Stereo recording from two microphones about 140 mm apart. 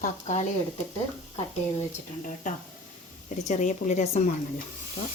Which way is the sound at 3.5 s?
60° left (ahead or behind).